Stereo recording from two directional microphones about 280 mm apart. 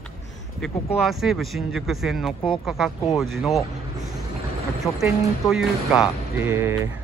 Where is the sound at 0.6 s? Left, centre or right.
Centre.